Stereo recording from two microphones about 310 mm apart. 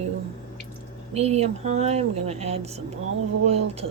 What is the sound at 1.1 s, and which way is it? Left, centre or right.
Speech, centre.